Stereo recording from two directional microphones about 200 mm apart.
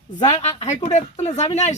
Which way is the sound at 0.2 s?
30° left (ahead or behind).